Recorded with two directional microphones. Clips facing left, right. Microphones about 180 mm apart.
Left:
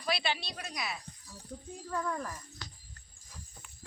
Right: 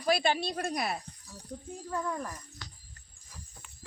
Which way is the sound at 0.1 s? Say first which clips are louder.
Right 7 dB; 45° right (ahead or behind).